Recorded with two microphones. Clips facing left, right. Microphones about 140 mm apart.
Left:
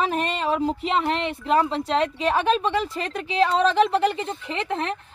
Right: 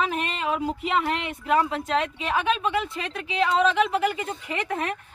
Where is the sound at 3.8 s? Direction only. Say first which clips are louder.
Left 3 dB; 30° left (ahead or behind).